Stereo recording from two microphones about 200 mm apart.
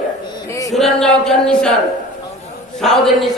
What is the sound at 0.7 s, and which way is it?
A man's voice, centre (ahead or behind).